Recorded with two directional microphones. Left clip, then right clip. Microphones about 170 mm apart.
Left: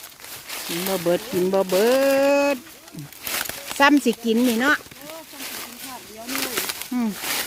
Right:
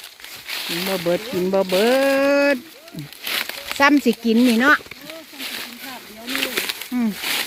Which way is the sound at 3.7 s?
Centre (ahead or behind).